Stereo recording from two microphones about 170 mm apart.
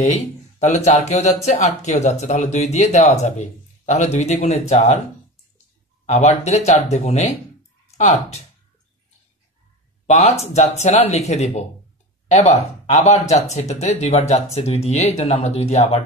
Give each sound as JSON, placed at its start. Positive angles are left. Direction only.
{"t": 0.6, "sound": "speech", "side_deg": 40}
{"t": 6.0, "sound": "speech", "side_deg": 45}
{"t": 10.0, "sound": "speech", "side_deg": 40}